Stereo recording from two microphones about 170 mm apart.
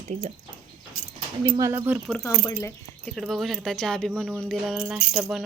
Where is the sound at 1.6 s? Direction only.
15° right (ahead or behind).